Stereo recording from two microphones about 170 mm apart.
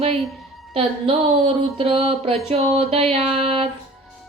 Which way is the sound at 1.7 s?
35° right (ahead or behind).